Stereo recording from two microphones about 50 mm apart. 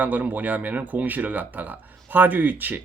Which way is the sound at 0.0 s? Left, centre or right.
Right.